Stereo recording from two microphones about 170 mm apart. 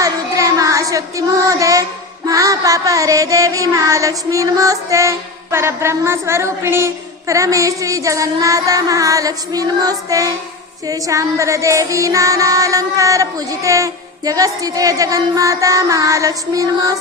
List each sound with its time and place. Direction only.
0.0 s child singing: 20° right (ahead or behind)
2.2 s music: 20° right (ahead or behind)